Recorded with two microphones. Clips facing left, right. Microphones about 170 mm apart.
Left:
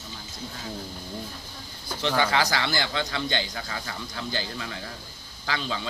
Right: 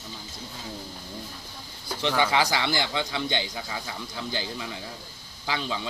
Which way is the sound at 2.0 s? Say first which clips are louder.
Even; 15° right (ahead or behind).